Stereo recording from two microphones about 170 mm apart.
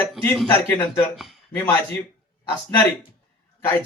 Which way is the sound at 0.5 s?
10° left (ahead or behind).